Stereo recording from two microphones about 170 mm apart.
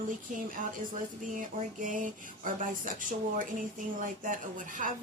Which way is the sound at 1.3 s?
50° right (ahead or behind).